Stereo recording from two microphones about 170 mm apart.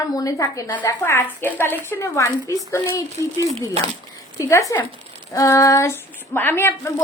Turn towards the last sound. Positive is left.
turn(degrees=15)  # may be behind; listen again after turning